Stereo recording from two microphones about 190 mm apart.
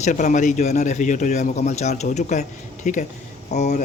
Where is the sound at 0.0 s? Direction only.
40° left (ahead or behind).